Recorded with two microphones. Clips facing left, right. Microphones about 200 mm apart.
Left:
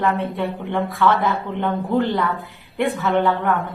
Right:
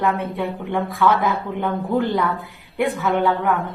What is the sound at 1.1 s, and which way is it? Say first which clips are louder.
Speech: right 1 dB; 15° right (ahead or behind).